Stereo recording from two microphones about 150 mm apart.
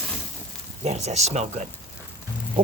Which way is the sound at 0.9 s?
45° right (ahead or behind).